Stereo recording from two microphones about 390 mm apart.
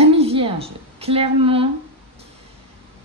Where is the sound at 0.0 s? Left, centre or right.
Centre.